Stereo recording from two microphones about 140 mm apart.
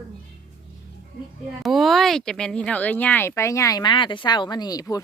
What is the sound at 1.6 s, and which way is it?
Speech, centre (ahead or behind).